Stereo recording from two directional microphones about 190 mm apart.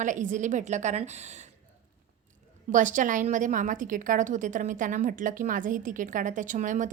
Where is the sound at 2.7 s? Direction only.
40° right (ahead or behind).